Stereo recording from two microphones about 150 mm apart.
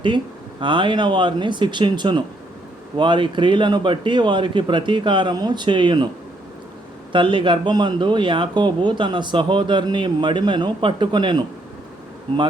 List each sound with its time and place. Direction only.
0.6 s speech: 35° right (ahead or behind)
7.1 s speech: 35° right (ahead or behind)